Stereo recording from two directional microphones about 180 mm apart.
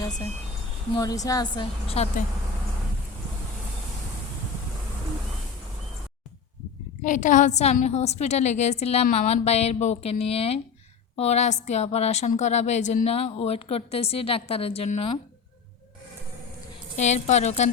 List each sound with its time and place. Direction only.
0.9 s a woman's voice: 20° left (ahead or behind)
2.0 s a woman's voice: 35° left (ahead or behind)
7.0 s a woman's voice: 45° left (ahead or behind)
17.0 s a woman's voice: 40° left (ahead or behind)